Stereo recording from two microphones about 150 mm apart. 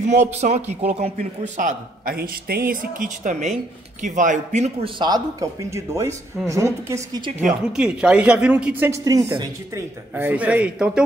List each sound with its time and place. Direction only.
0.0 s a man's voice: 50° right (ahead or behind); by 7.2 s 20° right (ahead or behind)
7.7 s speech: 5° right (ahead or behind)